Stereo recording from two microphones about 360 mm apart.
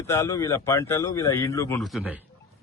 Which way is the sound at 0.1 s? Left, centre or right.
Centre.